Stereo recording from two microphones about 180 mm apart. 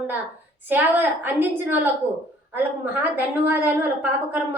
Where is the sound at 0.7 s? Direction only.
10° right (ahead or behind).